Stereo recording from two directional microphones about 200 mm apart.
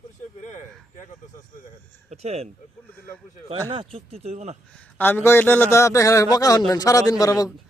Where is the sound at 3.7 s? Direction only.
30° right (ahead or behind).